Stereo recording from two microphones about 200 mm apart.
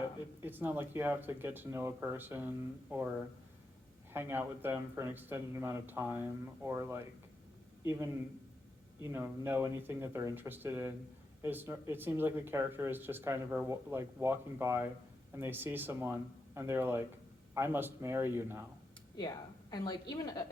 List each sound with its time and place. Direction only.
0.4 s speech: 10° right (ahead or behind)
19.7 s a woman's voice: 20° left (ahead or behind)